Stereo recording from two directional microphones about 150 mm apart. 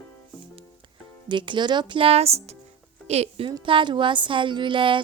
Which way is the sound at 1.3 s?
30° right (ahead or behind).